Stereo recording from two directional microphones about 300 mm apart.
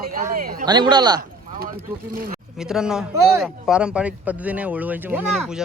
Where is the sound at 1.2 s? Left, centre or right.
Right.